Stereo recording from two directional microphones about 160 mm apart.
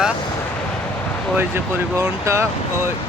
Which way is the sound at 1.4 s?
15° right (ahead or behind).